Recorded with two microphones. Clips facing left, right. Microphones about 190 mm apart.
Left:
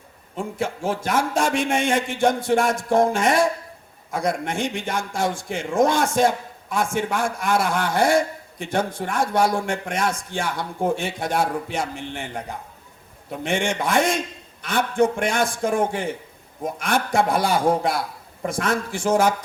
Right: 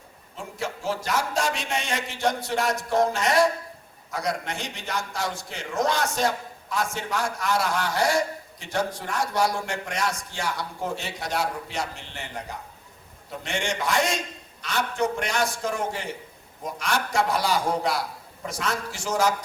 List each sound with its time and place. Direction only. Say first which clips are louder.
0.3 s a man's voice: left 6 dB; 55° left (ahead or behind)